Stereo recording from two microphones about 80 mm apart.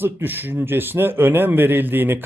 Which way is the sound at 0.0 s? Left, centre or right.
Right.